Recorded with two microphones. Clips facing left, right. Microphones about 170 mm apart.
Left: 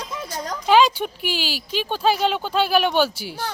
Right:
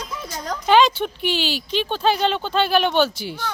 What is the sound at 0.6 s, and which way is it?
Speech, 5° left (ahead or behind).